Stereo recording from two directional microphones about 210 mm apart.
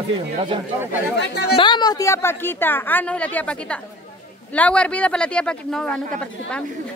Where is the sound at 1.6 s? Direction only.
20° left (ahead or behind).